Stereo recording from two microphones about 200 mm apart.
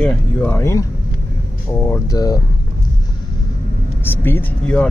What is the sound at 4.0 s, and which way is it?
Speech, 10° left (ahead or behind).